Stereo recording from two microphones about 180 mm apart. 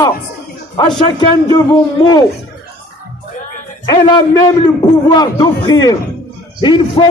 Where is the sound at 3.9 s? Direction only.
25° left (ahead or behind).